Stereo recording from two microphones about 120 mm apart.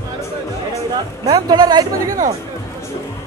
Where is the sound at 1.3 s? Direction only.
35° right (ahead or behind).